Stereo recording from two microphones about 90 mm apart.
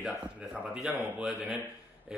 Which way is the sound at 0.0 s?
10° right (ahead or behind).